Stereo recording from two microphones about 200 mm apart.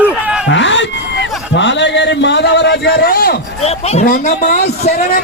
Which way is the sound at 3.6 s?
35° left (ahead or behind).